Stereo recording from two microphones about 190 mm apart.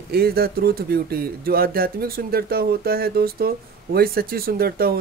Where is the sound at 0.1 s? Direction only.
55° right (ahead or behind).